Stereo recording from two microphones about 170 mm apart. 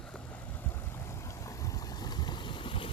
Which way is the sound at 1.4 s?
20° left (ahead or behind).